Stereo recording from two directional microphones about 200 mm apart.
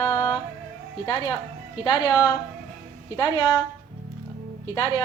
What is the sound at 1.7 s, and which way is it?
A woman's voice, 20° left (ahead or behind).